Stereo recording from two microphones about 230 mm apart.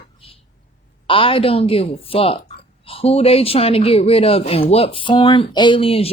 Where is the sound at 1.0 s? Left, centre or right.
Left.